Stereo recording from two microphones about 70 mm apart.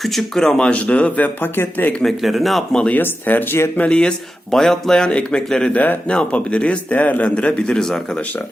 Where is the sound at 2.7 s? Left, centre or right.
Centre.